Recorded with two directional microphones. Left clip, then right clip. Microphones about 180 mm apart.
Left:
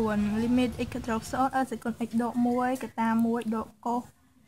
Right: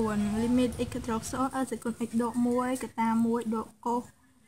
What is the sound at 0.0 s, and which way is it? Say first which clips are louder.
Speech: left 1 dB; 35° left (ahead or behind).